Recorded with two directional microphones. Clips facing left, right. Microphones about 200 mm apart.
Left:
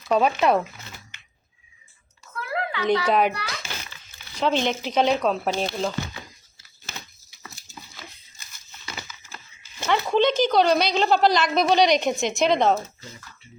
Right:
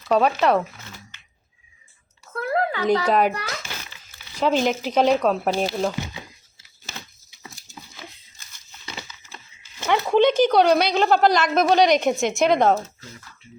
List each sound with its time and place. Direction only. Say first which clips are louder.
0.1 s speech: right 1 dB; centre (ahead or behind)
2.4 s a sound: right 5 dB; 45° right (ahead or behind)
3.1 s speech: even; centre (ahead or behind)
3.3 s a child's voice: right 3 dB; 45° right (ahead or behind)
4.4 s speech: right 3 dB; 5° right (ahead or behind)
7.3 s a sound: right 1 dB; 20° right (ahead or behind)
9.8 s a woman's voice: right 3 dB; 10° right (ahead or behind)